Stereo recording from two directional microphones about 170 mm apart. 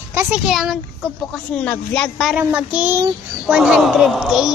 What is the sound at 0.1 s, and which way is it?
Speech, 15° right (ahead or behind).